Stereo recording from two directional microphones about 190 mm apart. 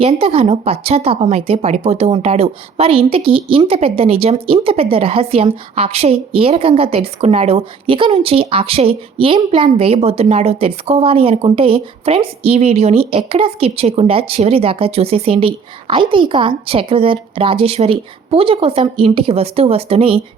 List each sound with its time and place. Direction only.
0.0 s a woman's voice: 30° right (ahead or behind)